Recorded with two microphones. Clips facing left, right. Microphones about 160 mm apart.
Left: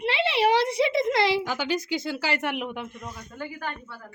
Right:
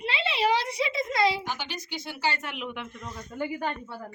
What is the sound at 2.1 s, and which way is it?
Speech, 90° left.